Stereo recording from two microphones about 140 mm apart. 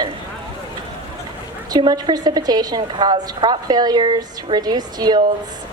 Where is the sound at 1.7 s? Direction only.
30° right (ahead or behind).